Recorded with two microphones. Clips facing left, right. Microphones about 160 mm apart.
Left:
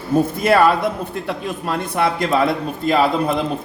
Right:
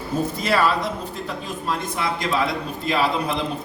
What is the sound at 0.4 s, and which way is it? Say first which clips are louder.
A man's voice: left 6 dB; 55° left (ahead or behind).